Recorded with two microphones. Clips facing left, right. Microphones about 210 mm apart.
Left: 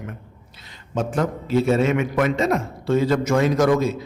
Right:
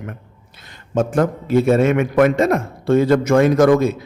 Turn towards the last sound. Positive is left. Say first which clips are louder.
# right 5 dB
turn(degrees=-55)  # may be behind; listen again after turning